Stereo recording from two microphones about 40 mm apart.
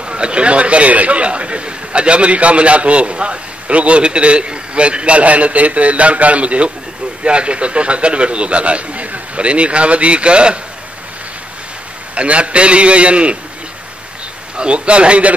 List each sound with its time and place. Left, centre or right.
0.0 s a man's voice: right
12.2 s a man's voice: right
14.6 s a man's voice: right